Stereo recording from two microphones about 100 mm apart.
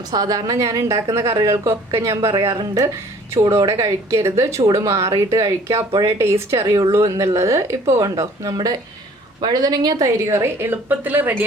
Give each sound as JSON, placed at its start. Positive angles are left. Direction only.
{"t": 0.1, "sound": "a woman's voice", "side_deg": -40}
{"t": 3.6, "sound": "a woman's voice", "side_deg": -35}